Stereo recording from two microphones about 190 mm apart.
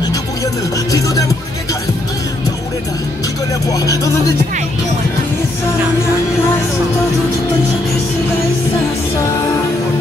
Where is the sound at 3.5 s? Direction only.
20° left (ahead or behind).